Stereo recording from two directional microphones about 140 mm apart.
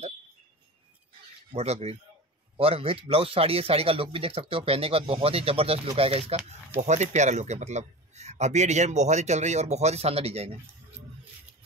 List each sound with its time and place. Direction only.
1.5 s speech: 50° right (ahead or behind)
6.8 s speech: 55° right (ahead or behind)